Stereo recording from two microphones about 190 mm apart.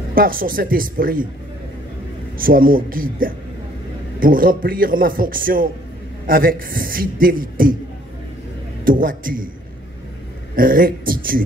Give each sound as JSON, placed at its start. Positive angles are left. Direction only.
{"t": 0.1, "sound": "a man's voice", "side_deg": -50}
{"t": 2.3, "sound": "a man's voice", "side_deg": -50}
{"t": 8.8, "sound": "a man's voice", "side_deg": -45}
{"t": 10.5, "sound": "a man's voice", "side_deg": -45}